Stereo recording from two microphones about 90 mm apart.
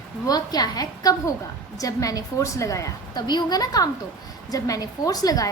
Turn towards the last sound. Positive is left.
turn(degrees=45)  # may be behind; listen again after turning